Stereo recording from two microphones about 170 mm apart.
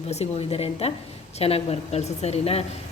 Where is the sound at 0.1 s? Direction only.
40° left (ahead or behind).